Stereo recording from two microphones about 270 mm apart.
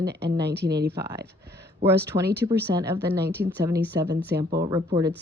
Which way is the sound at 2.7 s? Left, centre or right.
Centre.